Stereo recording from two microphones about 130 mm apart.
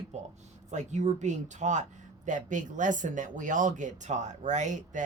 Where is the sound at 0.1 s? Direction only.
60° right (ahead or behind).